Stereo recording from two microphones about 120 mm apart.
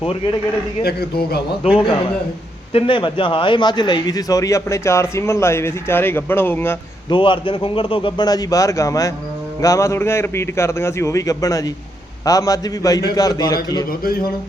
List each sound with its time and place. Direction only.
1.6 s a man's voice: 55° left (ahead or behind); by 6.7 s 20° left (ahead or behind)
7.1 s a man's voice: 45° left (ahead or behind)
8.3 s a man's voice: 30° left (ahead or behind)